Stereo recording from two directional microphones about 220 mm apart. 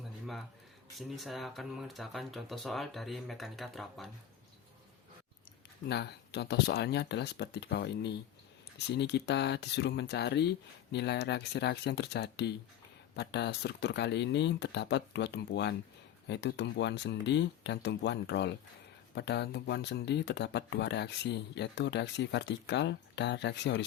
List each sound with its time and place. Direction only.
0.9 s speech: centre (ahead or behind)
5.9 s speech: 50° left (ahead or behind)